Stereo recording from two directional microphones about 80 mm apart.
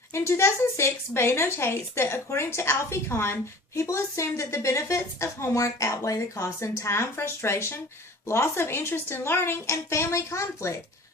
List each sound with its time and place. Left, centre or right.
0.1 s a woman's voice: left